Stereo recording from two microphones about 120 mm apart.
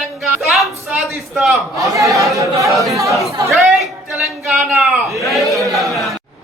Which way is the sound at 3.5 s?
Centre (ahead or behind).